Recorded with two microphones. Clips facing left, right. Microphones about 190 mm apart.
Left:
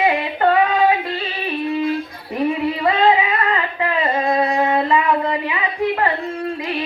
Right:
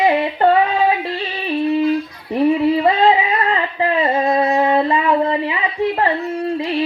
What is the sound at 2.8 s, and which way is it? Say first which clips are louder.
Music: right 2 dB; 30° right (ahead or behind).